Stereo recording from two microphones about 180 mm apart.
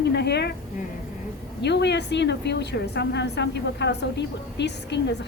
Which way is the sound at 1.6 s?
70° left (ahead or behind).